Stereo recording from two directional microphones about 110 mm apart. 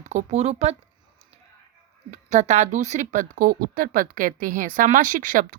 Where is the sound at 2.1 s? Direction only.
90° right.